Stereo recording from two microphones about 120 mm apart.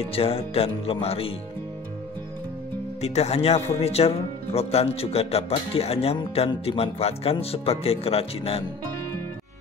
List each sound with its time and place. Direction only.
0.1 s speech: 55° left (ahead or behind)
3.0 s speech: 60° left (ahead or behind)